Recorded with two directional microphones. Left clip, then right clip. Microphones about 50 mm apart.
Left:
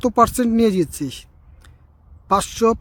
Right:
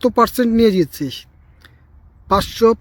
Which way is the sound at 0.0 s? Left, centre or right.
Left.